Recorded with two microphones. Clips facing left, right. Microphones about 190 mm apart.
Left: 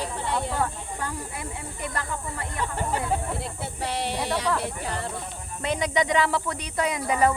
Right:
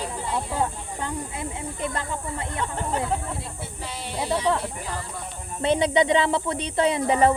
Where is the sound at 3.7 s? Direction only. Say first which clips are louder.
Left 8 dB; 70° left (ahead or behind).